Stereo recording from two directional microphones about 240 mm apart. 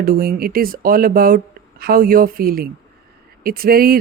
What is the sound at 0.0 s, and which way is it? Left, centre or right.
Speech, right.